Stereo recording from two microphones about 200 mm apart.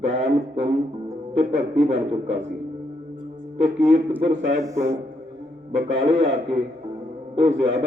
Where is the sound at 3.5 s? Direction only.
30° right (ahead or behind).